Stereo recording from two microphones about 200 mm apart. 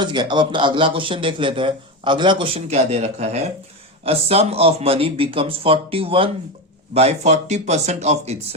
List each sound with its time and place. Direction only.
0.0 s a man's voice: 20° right (ahead or behind)